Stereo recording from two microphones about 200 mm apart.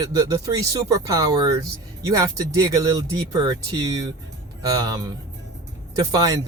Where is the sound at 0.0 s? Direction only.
15° right (ahead or behind).